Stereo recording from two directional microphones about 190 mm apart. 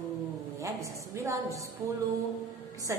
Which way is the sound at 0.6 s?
15° right (ahead or behind).